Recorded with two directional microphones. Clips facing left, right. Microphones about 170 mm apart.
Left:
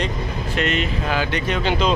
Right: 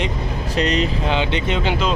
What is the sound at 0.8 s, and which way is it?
Speech, 25° right (ahead or behind).